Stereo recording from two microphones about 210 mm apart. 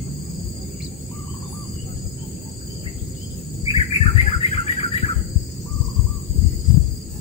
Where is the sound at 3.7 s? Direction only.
30° left (ahead or behind).